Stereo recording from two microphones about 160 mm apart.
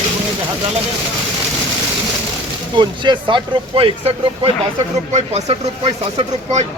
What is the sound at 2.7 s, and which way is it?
Speech, 30° right (ahead or behind).